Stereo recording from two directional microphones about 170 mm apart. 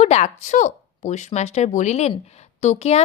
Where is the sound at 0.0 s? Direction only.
40° left (ahead or behind).